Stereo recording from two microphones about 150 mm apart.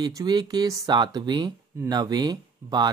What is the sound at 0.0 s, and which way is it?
Speech, 30° right (ahead or behind).